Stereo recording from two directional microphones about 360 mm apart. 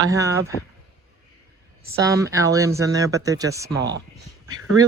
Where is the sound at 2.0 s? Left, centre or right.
Centre.